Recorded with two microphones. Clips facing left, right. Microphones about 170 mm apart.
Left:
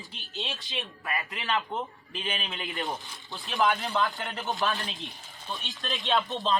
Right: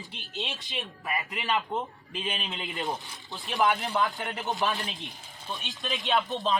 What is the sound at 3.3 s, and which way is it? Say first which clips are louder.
Speech: even; centre (ahead or behind).